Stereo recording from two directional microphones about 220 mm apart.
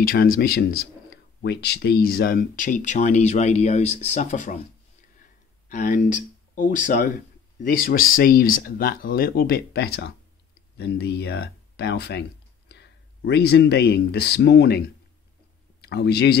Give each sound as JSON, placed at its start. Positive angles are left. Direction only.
{"t": 0.0, "sound": "a man's voice", "side_deg": 40}
{"t": 5.7, "sound": "a man's voice", "side_deg": 35}